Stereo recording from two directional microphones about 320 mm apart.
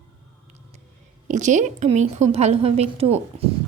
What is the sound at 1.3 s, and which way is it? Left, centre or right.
A woman's voice, right.